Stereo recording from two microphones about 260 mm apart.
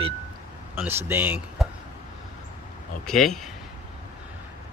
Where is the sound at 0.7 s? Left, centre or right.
Centre.